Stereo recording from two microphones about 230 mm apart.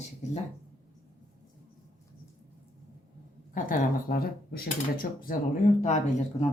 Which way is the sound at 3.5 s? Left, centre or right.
Left.